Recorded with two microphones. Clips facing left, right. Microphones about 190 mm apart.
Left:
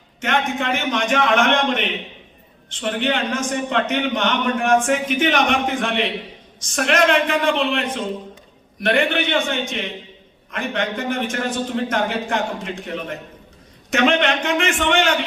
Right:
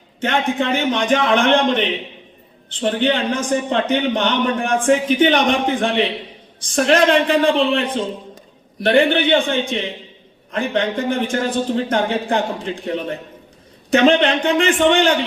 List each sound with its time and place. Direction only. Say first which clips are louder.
0.2 s a man's voice: right 3 dB; 30° right (ahead or behind)